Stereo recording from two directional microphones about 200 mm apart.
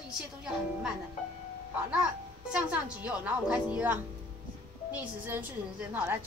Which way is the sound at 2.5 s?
5° right (ahead or behind).